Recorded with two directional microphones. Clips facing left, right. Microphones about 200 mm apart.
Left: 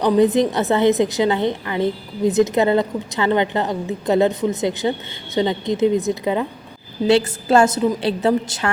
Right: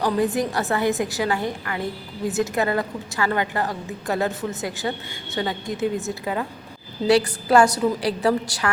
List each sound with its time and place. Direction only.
0.0 s a woman's voice: 20° left (ahead or behind)